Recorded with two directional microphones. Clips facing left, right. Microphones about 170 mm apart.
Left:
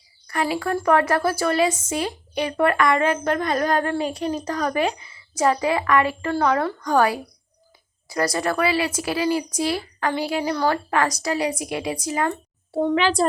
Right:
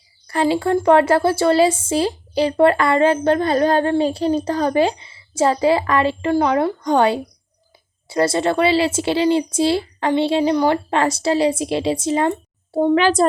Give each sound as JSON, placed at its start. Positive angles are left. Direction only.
{"t": 0.3, "sound": "a woman's voice", "side_deg": -30}
{"t": 12.9, "sound": "a child's voice", "side_deg": -45}